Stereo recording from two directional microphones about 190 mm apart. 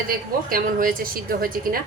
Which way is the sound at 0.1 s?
50° right (ahead or behind).